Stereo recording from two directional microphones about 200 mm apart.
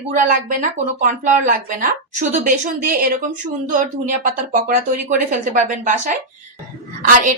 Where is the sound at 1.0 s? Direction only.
40° right (ahead or behind).